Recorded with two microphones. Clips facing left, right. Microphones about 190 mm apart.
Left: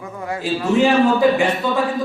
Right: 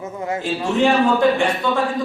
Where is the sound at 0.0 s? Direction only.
20° right (ahead or behind).